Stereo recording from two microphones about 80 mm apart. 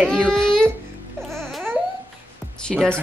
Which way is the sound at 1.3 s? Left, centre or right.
Centre.